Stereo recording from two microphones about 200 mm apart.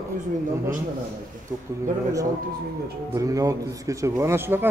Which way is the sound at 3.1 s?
15° right (ahead or behind).